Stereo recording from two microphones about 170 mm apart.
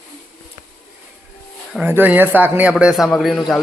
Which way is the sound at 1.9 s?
10° right (ahead or behind).